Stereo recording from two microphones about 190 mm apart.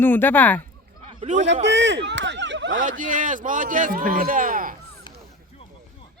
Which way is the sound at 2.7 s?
45° right (ahead or behind).